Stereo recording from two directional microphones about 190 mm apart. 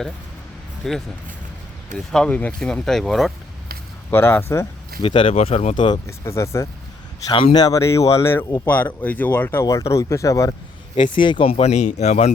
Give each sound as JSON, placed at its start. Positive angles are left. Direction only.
{"t": 0.8, "sound": "speech", "side_deg": 0}
{"t": 2.1, "sound": "speech", "side_deg": 5}
{"t": 4.1, "sound": "speech", "side_deg": 10}
{"t": 5.0, "sound": "speech", "side_deg": 30}